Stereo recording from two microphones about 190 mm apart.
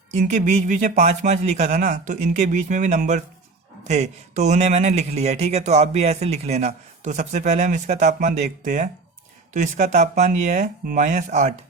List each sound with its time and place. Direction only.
0.1 s speech: 40° right (ahead or behind)